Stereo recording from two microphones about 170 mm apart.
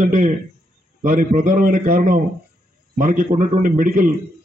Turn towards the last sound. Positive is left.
turn(degrees=-50)  # may be behind; listen again after turning